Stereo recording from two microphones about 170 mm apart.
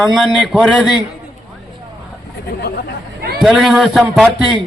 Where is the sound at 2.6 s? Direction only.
70° left (ahead or behind).